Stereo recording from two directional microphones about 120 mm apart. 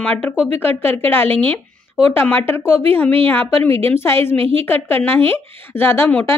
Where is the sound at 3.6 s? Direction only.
55° right (ahead or behind).